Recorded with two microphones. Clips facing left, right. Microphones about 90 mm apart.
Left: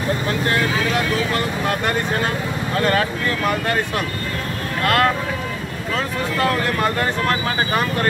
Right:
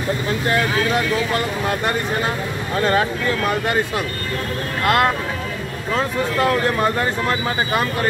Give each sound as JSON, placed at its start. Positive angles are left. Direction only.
{"t": 2.8, "sound": "speech", "side_deg": -25}
{"t": 4.8, "sound": "speech", "side_deg": -25}